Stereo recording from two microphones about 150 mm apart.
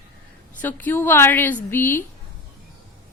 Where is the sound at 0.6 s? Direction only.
15° left (ahead or behind).